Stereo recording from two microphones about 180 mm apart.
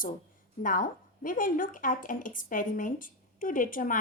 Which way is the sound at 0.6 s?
50° left (ahead or behind).